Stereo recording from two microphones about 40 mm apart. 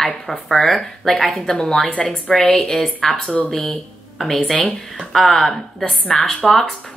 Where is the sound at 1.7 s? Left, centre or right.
Left.